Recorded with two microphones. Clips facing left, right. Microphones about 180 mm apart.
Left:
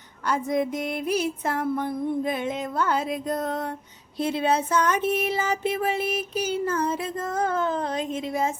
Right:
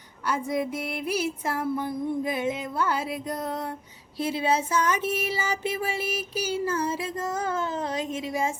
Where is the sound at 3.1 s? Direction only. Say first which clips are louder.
Left 4 dB; 55° left (ahead or behind).